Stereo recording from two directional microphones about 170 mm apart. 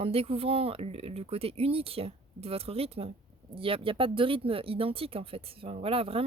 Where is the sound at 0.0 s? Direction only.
35° right (ahead or behind).